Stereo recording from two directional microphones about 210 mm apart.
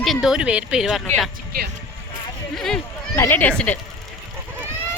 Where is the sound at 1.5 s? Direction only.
45° right (ahead or behind).